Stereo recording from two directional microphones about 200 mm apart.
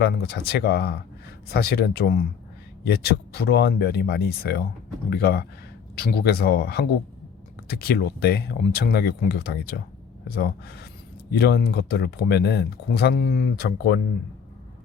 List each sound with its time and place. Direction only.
0.0 s speech: 50° left (ahead or behind)